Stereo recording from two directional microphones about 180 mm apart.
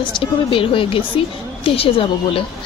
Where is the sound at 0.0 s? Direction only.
30° left (ahead or behind).